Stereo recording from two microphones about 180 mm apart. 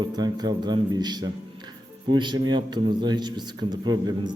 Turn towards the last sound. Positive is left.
turn(degrees=-25)  # may be behind; listen again after turning